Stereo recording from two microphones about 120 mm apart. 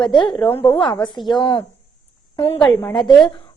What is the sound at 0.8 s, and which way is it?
Speech, 40° left (ahead or behind).